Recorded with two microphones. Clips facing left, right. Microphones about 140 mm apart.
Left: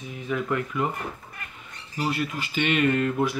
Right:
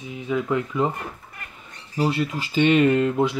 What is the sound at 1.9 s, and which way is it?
Speech, 30° right (ahead or behind).